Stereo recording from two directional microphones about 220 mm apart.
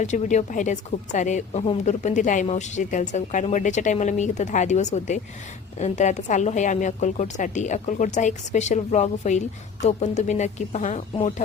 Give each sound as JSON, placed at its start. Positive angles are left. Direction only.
{"t": 0.0, "sound": "speech", "side_deg": 35}